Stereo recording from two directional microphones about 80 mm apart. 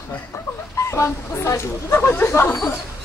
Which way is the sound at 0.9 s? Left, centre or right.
Left.